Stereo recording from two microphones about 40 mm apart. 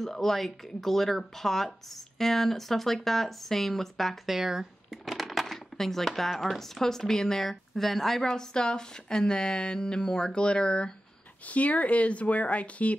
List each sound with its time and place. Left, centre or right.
0.0 s speech: centre
4.3 s a sound: centre
5.8 s speech: centre
8.2 s speech: centre
11.4 s speech: left